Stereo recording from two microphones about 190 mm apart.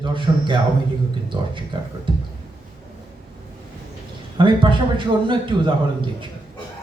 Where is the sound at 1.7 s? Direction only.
20° right (ahead or behind).